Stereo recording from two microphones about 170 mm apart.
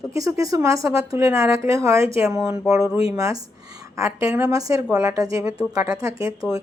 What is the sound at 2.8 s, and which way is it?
Speech, 5° right (ahead or behind).